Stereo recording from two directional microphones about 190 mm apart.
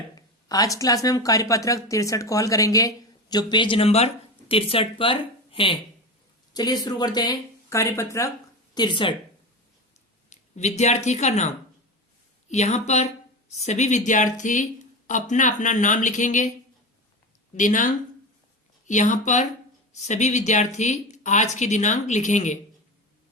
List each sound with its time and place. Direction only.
0.2 s speech: 20° left (ahead or behind)
10.2 s speech: 35° left (ahead or behind)
17.5 s speech: 40° left (ahead or behind)
18.9 s speech: 40° left (ahead or behind)